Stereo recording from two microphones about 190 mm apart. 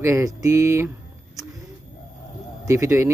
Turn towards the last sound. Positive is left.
turn(degrees=-15)  # may be behind; listen again after turning